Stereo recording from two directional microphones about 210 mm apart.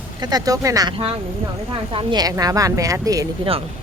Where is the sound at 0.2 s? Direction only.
20° right (ahead or behind).